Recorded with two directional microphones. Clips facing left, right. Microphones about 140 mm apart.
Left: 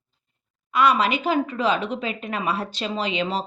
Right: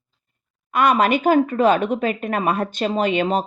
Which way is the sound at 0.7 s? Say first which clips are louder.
Right 3 dB; 50° right (ahead or behind).